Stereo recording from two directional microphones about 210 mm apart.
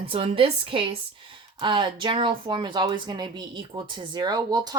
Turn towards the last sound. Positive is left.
turn(degrees=-20)  # may be behind; listen again after turning